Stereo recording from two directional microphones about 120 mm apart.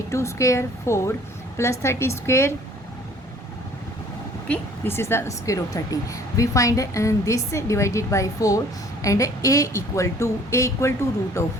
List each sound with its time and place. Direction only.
0.1 s a woman's voice: 25° left (ahead or behind)
4.4 s a woman's voice: 15° left (ahead or behind)